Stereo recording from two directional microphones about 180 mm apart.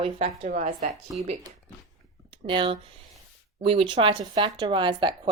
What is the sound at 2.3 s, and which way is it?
Speech, 30° right (ahead or behind).